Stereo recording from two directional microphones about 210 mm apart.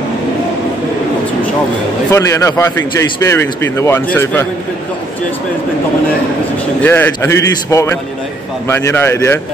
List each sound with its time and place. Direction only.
2.0 s a man's voice: 15° left (ahead or behind)
6.8 s a man's voice: 10° left (ahead or behind)